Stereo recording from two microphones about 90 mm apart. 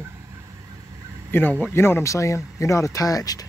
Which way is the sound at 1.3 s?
20° left (ahead or behind).